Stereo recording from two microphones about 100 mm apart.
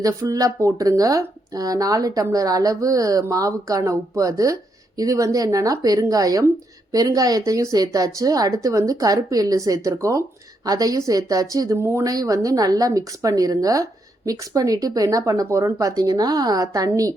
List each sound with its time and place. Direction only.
0.0 s speech: 35° right (ahead or behind)